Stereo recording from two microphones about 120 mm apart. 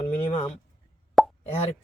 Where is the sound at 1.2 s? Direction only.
Centre (ahead or behind).